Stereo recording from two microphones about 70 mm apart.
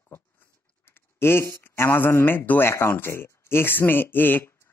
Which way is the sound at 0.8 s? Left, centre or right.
Left.